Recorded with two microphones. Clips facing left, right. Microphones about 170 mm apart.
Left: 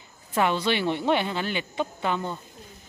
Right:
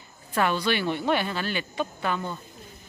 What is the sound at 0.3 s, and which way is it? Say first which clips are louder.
Speech: left 1 dB; 20° left (ahead or behind).